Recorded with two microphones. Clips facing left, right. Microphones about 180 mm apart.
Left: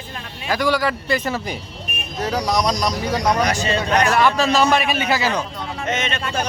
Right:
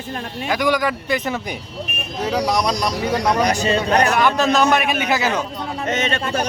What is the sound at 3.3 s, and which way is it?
Speech, 35° right (ahead or behind).